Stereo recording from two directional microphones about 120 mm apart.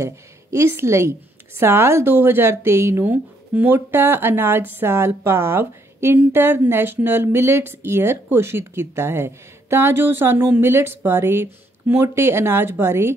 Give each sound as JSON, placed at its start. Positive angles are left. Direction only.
{"t": 0.0, "sound": "a woman's voice", "side_deg": -20}